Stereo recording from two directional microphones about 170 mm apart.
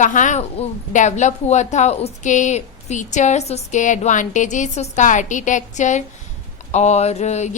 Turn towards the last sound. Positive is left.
turn(degrees=40)  # may be behind; listen again after turning